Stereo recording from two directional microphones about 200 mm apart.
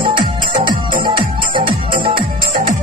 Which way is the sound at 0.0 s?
25° right (ahead or behind).